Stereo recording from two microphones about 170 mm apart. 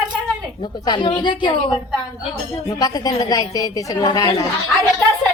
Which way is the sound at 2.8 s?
20° left (ahead or behind).